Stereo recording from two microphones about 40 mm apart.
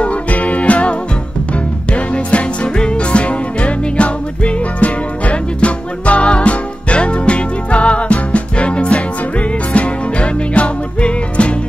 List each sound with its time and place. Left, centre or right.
0.0 s music: left
2.0 s music: left